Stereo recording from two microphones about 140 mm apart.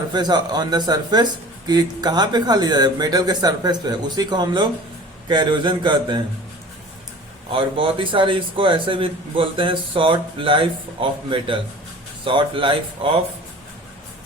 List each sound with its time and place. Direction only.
0.1 s speech: 30° right (ahead or behind)
7.5 s speech: 40° right (ahead or behind)